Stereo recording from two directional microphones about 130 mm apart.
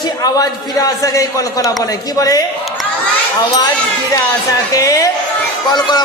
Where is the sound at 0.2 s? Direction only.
30° left (ahead or behind).